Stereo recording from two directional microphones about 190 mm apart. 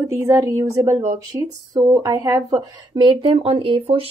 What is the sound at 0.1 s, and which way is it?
Speech, 15° right (ahead or behind).